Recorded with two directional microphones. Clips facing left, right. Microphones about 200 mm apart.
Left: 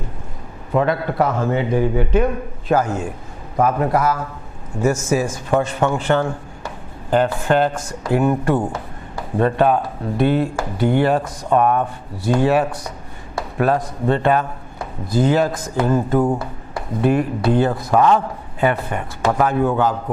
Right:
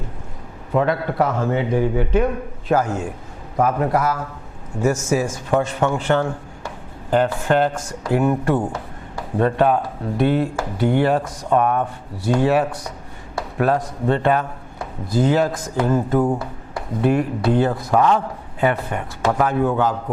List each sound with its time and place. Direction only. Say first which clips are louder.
0.7 s a man's voice: left 1 dB; 15° left (ahead or behind)
13.4 s a sound: left 1 dB; 15° left (ahead or behind)
14.1 s a man's voice: left 1 dB; 15° left (ahead or behind)